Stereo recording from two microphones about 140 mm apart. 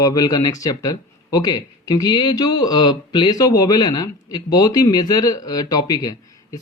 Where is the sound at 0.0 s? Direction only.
25° left (ahead or behind).